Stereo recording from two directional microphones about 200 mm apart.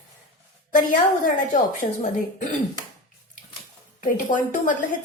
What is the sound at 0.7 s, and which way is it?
A woman's voice, 40° left (ahead or behind).